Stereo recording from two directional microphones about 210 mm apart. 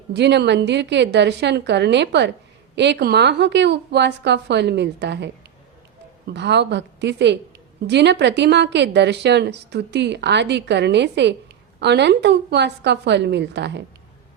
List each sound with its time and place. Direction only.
0.1 s a woman's voice: 55° right (ahead or behind)